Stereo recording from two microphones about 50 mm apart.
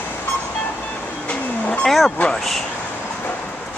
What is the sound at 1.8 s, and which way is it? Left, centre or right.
Speech, centre.